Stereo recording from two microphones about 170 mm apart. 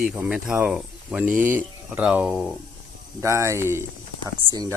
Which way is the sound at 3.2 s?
15° right (ahead or behind).